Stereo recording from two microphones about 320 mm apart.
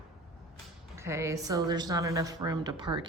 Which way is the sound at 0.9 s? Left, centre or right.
Centre.